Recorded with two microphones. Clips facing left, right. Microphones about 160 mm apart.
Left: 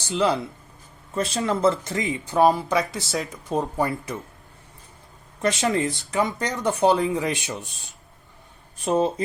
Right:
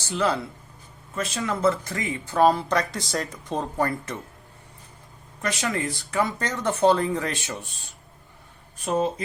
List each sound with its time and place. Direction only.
0.1 s speech: 15° left (ahead or behind)
1.1 s speech: 30° left (ahead or behind); by 4.2 s 10° left (ahead or behind)
5.4 s speech: 25° left (ahead or behind)
8.8 s speech: 30° left (ahead or behind)